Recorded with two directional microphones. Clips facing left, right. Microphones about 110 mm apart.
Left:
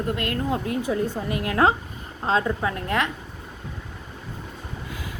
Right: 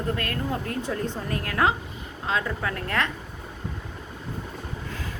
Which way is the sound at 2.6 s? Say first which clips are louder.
Left 3 dB; 20° left (ahead or behind).